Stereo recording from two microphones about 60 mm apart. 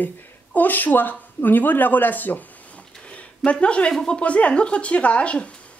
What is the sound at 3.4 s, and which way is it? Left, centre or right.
Speech, centre.